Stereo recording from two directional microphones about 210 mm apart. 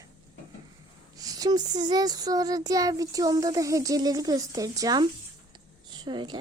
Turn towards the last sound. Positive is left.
turn(degrees=-20)  # may be behind; listen again after turning